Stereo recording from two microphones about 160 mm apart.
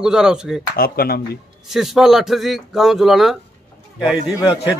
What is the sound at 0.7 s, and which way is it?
Speech, 70° left (ahead or behind).